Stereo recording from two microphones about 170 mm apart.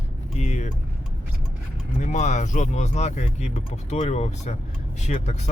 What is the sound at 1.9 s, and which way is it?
Speech, 45° left (ahead or behind).